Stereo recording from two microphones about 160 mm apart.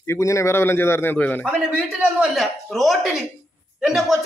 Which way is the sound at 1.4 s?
10° right (ahead or behind).